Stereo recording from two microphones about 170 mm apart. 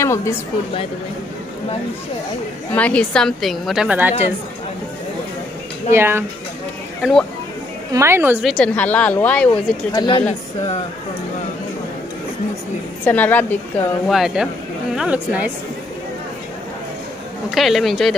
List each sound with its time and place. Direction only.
0.0 s a woman's voice: 15° left (ahead or behind)
2.7 s a woman's voice: 5° left (ahead or behind)
5.9 s a woman's voice: 15° right (ahead or behind)
7.0 s speech: centre (ahead or behind)
7.9 s a woman's voice: 15° right (ahead or behind)
8.5 s speech: 5° left (ahead or behind)
9.9 s speech: 30° left (ahead or behind)
13.0 s speech: 10° left (ahead or behind)
14.0 s a woman's voice: centre (ahead or behind)
17.6 s a woman's voice: centre (ahead or behind)